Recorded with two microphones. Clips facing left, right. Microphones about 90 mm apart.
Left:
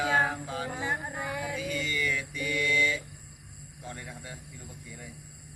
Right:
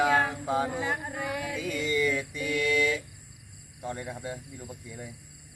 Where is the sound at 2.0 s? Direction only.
35° right (ahead or behind).